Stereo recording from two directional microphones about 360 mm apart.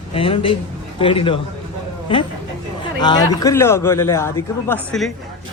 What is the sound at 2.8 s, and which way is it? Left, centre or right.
A man's voice, centre.